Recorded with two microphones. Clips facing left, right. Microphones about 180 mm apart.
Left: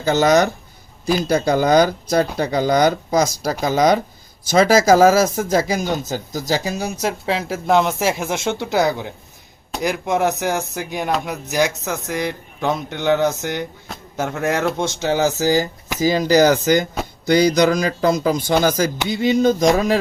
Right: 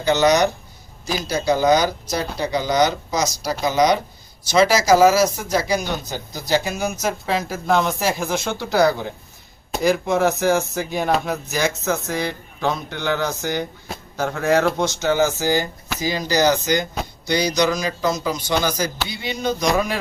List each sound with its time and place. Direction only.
0.1 s speech: 50° left (ahead or behind)
16.0 s speech: 50° left (ahead or behind)